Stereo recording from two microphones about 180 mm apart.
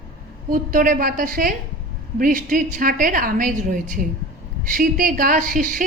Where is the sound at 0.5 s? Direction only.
50° right (ahead or behind).